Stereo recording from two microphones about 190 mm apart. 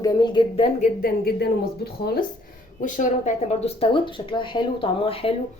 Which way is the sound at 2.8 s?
40° left (ahead or behind).